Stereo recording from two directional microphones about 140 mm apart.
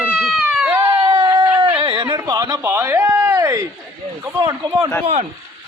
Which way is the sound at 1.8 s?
35° right (ahead or behind).